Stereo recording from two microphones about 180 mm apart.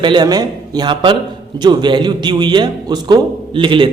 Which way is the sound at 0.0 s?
25° right (ahead or behind).